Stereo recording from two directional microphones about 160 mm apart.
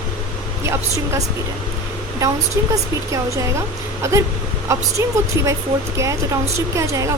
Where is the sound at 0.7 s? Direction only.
15° right (ahead or behind).